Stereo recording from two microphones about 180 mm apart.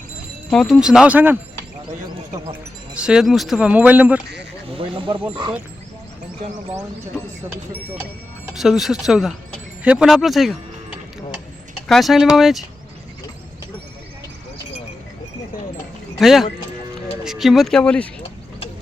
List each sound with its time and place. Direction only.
0.5 s speech: centre (ahead or behind)
2.9 s speech: 5° right (ahead or behind)
4.7 s a sound: 30° right (ahead or behind)
5.3 s speech: 25° right (ahead or behind)
8.5 s speech: centre (ahead or behind)
11.9 s speech: centre (ahead or behind)
16.1 s speech: centre (ahead or behind)